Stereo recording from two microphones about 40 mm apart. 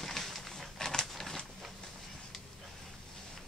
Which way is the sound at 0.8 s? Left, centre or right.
Centre.